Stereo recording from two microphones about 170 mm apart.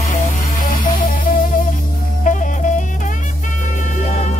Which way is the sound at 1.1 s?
55° left (ahead or behind).